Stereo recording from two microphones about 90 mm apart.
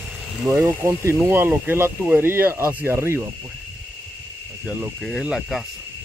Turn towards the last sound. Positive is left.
turn(degrees=-5)  # may be behind; listen again after turning